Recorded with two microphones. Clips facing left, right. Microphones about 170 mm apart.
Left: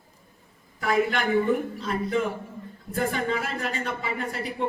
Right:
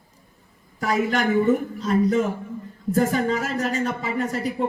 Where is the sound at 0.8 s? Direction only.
40° right (ahead or behind).